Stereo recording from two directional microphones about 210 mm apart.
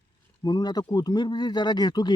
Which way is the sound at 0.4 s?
20° left (ahead or behind).